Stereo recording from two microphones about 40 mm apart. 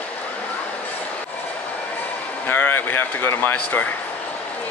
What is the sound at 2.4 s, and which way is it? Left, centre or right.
Speech, left.